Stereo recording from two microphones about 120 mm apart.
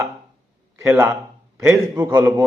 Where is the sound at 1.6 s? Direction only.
30° right (ahead or behind).